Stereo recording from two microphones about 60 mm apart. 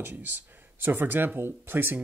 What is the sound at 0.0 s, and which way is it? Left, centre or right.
Speech, right.